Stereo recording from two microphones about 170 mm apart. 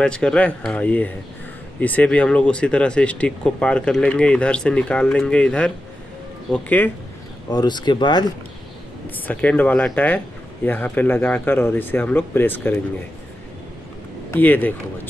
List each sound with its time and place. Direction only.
0.0 s speech: 5° left (ahead or behind)
7.4 s speech: 25° left (ahead or behind)
9.1 s speech: 10° left (ahead or behind)
14.3 s speech: 10° left (ahead or behind)